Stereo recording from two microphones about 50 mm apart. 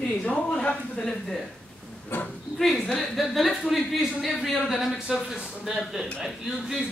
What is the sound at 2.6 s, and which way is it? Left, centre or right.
A woman's voice, centre.